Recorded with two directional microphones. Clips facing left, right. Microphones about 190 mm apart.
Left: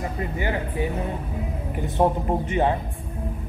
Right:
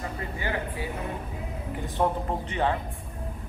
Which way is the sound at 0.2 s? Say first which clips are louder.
Left 5 dB; 20° left (ahead or behind).